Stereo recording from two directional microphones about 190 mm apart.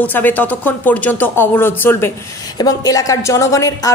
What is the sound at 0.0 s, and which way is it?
Speech, 10° left (ahead or behind).